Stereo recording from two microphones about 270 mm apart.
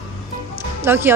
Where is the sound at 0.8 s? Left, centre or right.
Centre.